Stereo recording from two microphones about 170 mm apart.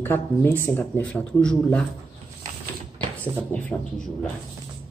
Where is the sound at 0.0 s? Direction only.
10° left (ahead or behind).